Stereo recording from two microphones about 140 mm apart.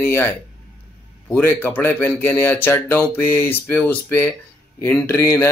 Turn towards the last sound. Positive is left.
turn(degrees=20)  # may be behind; listen again after turning